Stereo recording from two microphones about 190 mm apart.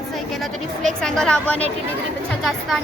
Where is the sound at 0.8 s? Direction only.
5° left (ahead or behind).